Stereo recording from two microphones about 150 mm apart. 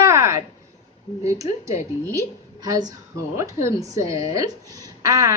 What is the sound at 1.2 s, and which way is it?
A woman's voice, 20° right (ahead or behind).